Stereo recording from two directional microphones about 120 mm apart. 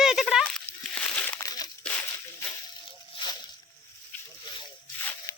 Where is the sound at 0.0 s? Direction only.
5° right (ahead or behind).